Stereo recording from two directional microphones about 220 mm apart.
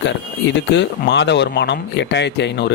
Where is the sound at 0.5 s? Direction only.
50° left (ahead or behind).